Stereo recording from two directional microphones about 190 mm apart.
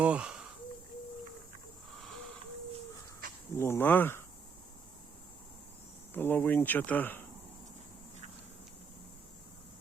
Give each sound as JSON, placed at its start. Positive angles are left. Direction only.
{"t": 0.0, "sound": "a sound", "side_deg": -5}
{"t": 3.5, "sound": "speech", "side_deg": 15}
{"t": 6.1, "sound": "speech", "side_deg": 10}